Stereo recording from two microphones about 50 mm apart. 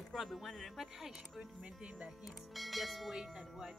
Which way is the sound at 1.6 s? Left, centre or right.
Centre.